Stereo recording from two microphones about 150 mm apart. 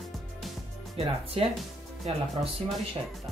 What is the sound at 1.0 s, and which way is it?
Speech, 40° right (ahead or behind).